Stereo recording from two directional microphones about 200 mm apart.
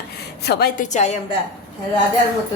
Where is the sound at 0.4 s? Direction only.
55° left (ahead or behind).